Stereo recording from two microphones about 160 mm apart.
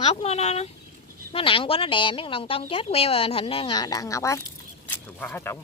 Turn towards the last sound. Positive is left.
turn(degrees=15)  # may be behind; listen again after turning